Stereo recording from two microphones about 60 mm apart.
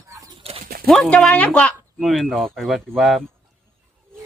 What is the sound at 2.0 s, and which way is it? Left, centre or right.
Speech, centre.